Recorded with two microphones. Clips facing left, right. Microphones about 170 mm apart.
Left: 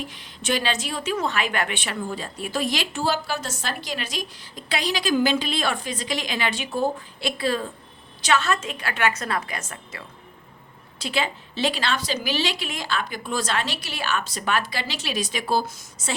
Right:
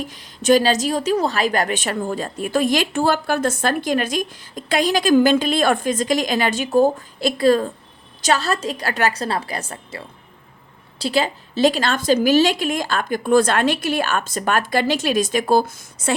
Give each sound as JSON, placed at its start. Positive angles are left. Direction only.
{"t": 0.0, "sound": "a woman's voice", "side_deg": -40}